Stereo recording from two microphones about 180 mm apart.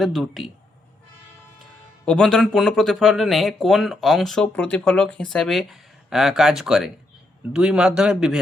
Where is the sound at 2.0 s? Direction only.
5° left (ahead or behind).